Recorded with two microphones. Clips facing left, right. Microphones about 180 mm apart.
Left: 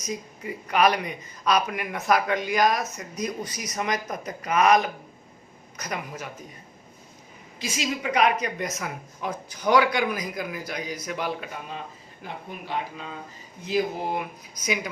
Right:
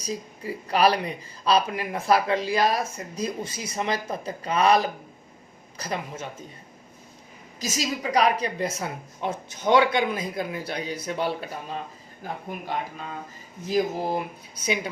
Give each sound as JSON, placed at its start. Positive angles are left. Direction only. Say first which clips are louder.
{"t": 0.0, "sound": "speech", "louder": "right 1 dB", "side_deg": -30}
{"t": 7.6, "sound": "speech", "louder": "right 1 dB", "side_deg": -40}
{"t": 12.2, "sound": "speech", "louder": "right 3 dB", "side_deg": -45}